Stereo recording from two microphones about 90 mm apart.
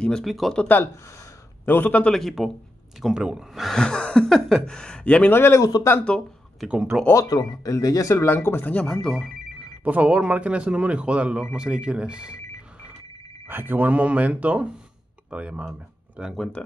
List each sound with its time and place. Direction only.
0.0 s speech: 5° left (ahead or behind)
0.6 s speech: 20° left (ahead or behind)
2.1 s speech: centre (ahead or behind); by 5.6 s 25° left (ahead or behind)
5.6 s speech: 45° left (ahead or behind)
6.0 s speech: 10° left (ahead or behind)
6.9 s speech: 10° right (ahead or behind)
7.2 s speech: 45° left (ahead or behind); by 8.7 s 25° left (ahead or behind)
8.7 s speech: 10° left (ahead or behind)
9.8 s speech: 15° right (ahead or behind)
12.3 s a sound: 35° left (ahead or behind)
13.5 s speech: 25° right (ahead or behind)